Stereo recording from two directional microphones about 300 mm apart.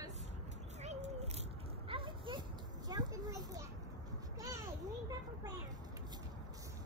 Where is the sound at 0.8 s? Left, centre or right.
Right.